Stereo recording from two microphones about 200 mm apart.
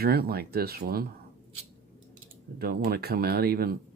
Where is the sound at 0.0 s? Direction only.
50° right (ahead or behind).